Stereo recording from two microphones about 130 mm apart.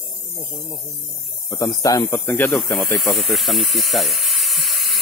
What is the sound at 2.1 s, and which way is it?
Snake, 15° left (ahead or behind).